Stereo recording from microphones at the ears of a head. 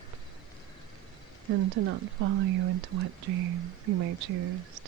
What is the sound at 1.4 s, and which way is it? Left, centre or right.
Speech, right.